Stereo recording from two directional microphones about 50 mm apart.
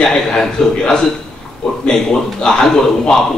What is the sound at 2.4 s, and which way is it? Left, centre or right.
Speech, centre.